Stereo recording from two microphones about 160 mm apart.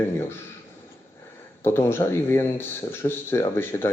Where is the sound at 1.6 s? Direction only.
15° left (ahead or behind).